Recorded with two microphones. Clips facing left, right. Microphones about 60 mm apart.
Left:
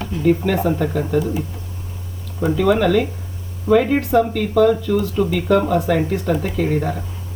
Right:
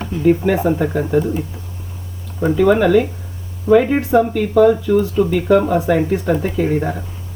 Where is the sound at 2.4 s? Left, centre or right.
Centre.